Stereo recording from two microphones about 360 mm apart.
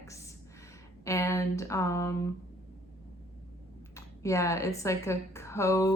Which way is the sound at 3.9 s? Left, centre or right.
Centre.